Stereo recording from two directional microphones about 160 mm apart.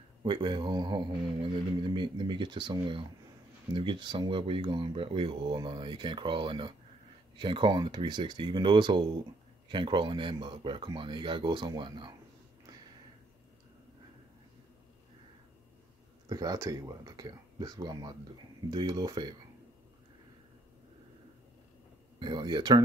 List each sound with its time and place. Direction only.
0.2 s speech: 30° right (ahead or behind)
16.3 s speech: 25° right (ahead or behind)
22.2 s speech: 30° right (ahead or behind)